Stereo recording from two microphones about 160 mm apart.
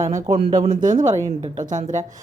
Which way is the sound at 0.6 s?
55° right (ahead or behind).